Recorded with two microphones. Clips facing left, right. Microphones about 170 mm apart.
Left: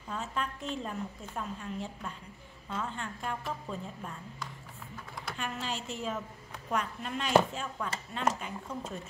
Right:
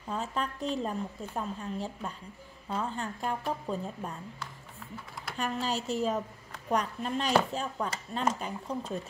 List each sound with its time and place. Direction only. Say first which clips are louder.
0.1 s a woman's voice: right 3 dB; 35° right (ahead or behind)
5.4 s a woman's voice: right 6 dB; 40° right (ahead or behind)